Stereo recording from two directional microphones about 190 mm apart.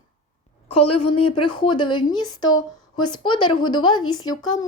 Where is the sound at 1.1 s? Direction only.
25° left (ahead or behind).